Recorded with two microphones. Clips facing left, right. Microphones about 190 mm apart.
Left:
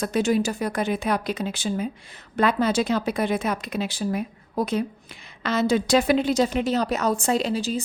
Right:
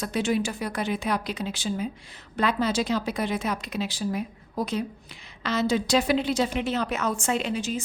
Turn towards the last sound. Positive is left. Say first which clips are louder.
# left 4 dB
turn(degrees=35)  # may be behind; listen again after turning